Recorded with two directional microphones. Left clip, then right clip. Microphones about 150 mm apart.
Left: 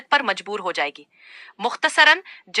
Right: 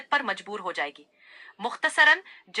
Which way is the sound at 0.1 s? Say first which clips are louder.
Left 7 dB; 35° left (ahead or behind).